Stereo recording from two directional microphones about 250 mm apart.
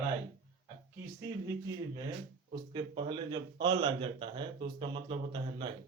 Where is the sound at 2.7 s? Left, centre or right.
Centre.